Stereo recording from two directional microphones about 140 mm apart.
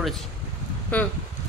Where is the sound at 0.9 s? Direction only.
10° left (ahead or behind).